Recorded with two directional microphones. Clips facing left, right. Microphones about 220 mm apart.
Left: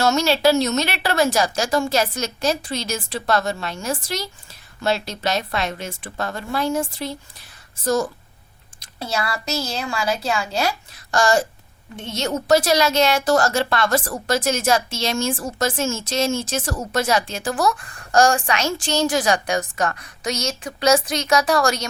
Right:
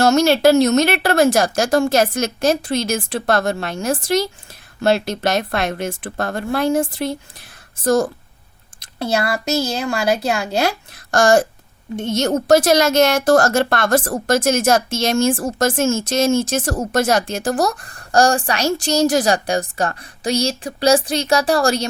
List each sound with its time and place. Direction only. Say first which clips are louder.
0.0 s speech: right 5 dB; 50° right (ahead or behind)
9.0 s a woman's voice: right 6 dB; 60° right (ahead or behind); by 21.8 s 30° right (ahead or behind)